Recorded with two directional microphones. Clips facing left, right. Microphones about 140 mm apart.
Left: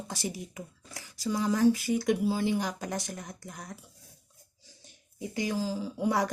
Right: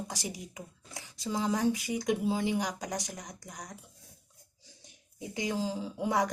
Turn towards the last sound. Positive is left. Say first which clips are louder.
# left 1 dB
turn(degrees=-20)  # may be behind; listen again after turning